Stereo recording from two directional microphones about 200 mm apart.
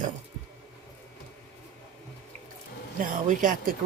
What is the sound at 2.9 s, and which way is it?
Speech, 40° right (ahead or behind).